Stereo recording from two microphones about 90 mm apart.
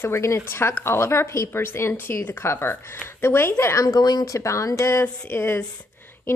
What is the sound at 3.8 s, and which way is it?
A woman's voice, 45° left (ahead or behind).